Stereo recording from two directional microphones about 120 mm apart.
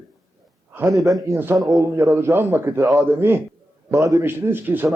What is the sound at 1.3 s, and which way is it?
A man's voice, 20° right (ahead or behind).